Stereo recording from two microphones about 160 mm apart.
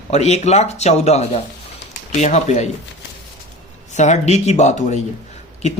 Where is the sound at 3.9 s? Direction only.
45° left (ahead or behind).